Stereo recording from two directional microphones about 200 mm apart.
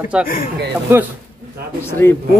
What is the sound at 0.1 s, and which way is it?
Speech, 5° right (ahead or behind).